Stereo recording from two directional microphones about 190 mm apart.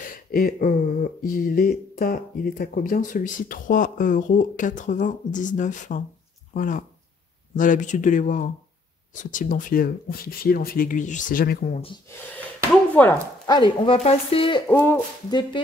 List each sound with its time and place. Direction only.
0.0 s speech: 50° left (ahead or behind)
13.0 s speech: 10° left (ahead or behind)
13.5 s speech: 25° left (ahead or behind)
14.7 s speech: 10° left (ahead or behind)
15.2 s speech: 25° left (ahead or behind)